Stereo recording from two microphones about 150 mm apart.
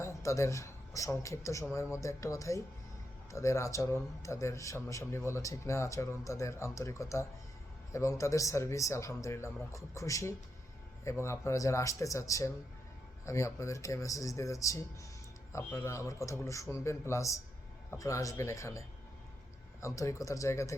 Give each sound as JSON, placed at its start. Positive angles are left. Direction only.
{"t": 0.0, "sound": "a man's voice", "side_deg": 20}